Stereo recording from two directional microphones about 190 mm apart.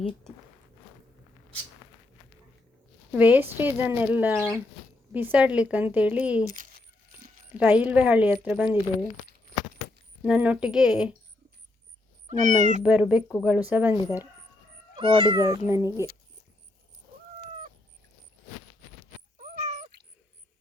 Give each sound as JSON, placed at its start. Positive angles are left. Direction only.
{"t": 3.1, "sound": "speech", "side_deg": -10}
{"t": 6.5, "sound": "coin", "side_deg": -45}
{"t": 7.5, "sound": "speech", "side_deg": -10}
{"t": 10.2, "sound": "speech", "side_deg": -5}
{"t": 12.3, "sound": "speech", "side_deg": -40}
{"t": 12.8, "sound": "speech", "side_deg": -5}
{"t": 14.9, "sound": "speech", "side_deg": -25}
{"t": 15.6, "sound": "speech", "side_deg": -15}
{"t": 19.4, "sound": "cat", "side_deg": -40}